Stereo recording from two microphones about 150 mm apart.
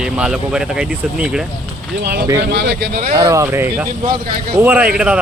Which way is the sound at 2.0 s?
90° right.